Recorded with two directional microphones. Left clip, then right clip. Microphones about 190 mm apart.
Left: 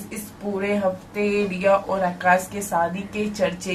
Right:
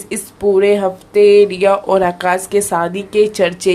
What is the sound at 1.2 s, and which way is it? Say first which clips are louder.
A woman's voice: right 19 dB; 45° right (ahead or behind).